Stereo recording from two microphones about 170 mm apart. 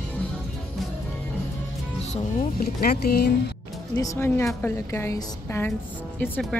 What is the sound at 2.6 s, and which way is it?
Speech, 60° left (ahead or behind).